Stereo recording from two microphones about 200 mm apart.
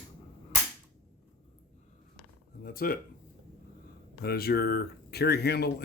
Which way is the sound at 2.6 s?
45° left (ahead or behind).